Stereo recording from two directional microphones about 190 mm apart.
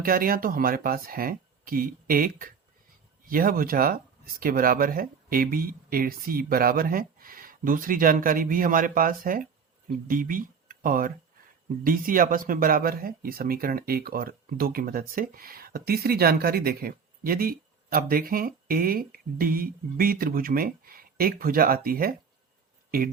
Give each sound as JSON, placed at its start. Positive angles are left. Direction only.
{"t": 0.0, "sound": "speech", "side_deg": -50}